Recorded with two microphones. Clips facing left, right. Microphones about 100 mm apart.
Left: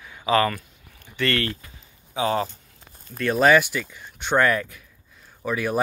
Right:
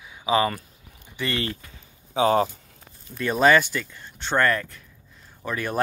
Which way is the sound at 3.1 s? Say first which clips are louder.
Left 1 dB; centre (ahead or behind).